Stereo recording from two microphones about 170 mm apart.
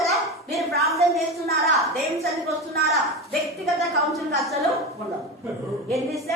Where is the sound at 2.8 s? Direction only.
Centre (ahead or behind).